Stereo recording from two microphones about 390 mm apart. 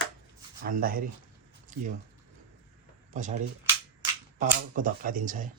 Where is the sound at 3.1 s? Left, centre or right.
Centre.